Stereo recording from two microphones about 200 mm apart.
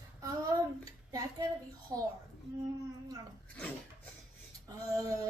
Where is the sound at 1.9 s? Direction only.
15° right (ahead or behind).